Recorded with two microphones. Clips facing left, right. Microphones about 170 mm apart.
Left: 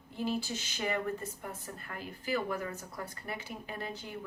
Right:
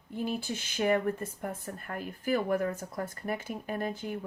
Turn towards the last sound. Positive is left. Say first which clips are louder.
# right 7 dB
turn(degrees=-50)  # may be behind; listen again after turning